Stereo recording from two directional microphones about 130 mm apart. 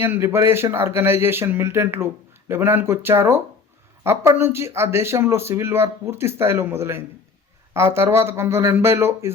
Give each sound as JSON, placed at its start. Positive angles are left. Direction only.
{"t": 0.0, "sound": "speech", "side_deg": -20}